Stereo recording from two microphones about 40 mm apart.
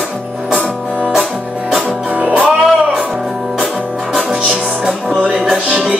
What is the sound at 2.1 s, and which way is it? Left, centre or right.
Music, right.